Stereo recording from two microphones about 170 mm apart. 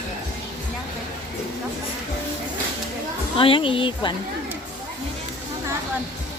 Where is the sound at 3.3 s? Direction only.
30° left (ahead or behind).